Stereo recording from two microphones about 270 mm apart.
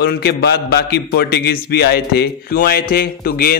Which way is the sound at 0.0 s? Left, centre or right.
Left.